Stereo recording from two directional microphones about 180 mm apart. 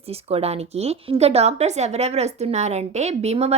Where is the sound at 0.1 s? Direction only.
35° right (ahead or behind).